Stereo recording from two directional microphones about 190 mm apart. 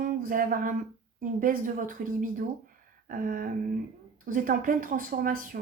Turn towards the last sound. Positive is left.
turn(degrees=-45)  # may be behind; listen again after turning